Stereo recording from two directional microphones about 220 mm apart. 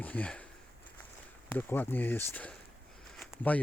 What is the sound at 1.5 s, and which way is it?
Speech, 10° left (ahead or behind).